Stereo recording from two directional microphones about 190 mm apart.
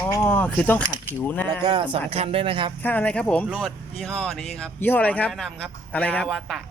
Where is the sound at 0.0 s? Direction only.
10° left (ahead or behind).